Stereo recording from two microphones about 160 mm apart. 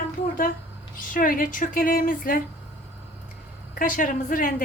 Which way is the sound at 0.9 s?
60° left (ahead or behind).